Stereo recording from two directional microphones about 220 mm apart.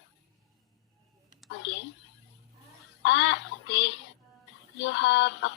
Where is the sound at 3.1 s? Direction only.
55° left (ahead or behind).